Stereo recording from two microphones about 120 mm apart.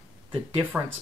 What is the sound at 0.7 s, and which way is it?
Speech, 15° right (ahead or behind).